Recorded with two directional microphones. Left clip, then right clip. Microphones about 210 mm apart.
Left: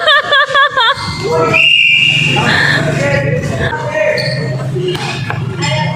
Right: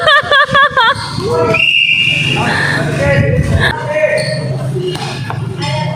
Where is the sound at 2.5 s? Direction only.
20° right (ahead or behind).